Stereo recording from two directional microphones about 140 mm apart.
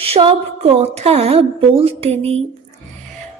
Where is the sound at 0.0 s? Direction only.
40° right (ahead or behind).